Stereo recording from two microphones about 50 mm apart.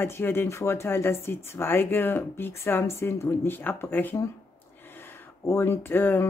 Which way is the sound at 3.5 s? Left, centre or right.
Left.